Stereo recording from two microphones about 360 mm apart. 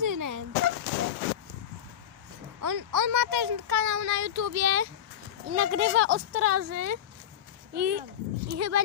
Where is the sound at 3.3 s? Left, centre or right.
Right.